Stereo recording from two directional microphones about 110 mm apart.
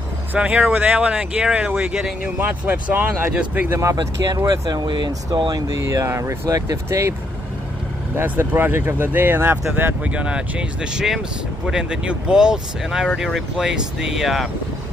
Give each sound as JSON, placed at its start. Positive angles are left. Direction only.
{"t": 0.3, "sound": "speech", "side_deg": -10}
{"t": 3.8, "sound": "speech", "side_deg": -35}
{"t": 5.7, "sound": "speech", "side_deg": -30}
{"t": 8.2, "sound": "speech", "side_deg": -20}